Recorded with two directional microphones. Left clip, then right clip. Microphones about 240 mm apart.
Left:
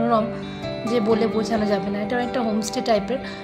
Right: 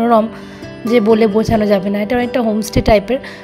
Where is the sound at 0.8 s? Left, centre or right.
Right.